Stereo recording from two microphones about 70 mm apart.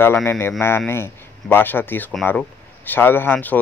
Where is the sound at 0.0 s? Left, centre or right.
Left.